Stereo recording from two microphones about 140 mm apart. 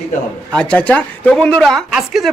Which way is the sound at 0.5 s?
5° left (ahead or behind).